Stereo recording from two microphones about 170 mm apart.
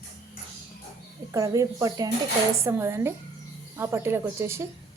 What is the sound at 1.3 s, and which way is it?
A woman's voice, 20° right (ahead or behind).